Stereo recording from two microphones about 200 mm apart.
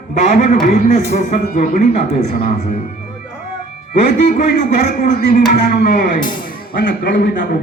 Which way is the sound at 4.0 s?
40° left (ahead or behind).